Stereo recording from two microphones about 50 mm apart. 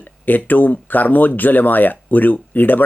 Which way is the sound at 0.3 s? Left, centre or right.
Left.